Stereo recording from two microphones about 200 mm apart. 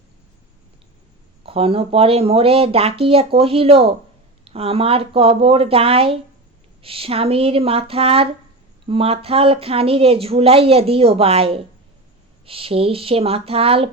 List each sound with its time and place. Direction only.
1.5 s speech: 30° right (ahead or behind)